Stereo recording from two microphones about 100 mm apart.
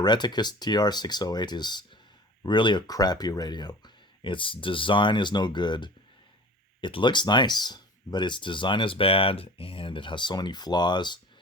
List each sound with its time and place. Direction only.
0.0 s speech: 45° left (ahead or behind)